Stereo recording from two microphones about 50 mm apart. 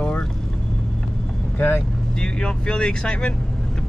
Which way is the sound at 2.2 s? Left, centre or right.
Centre.